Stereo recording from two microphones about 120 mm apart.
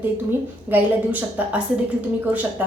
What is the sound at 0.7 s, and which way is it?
Speech, 15° right (ahead or behind).